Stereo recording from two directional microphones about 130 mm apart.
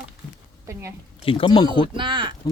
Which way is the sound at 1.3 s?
40° left (ahead or behind).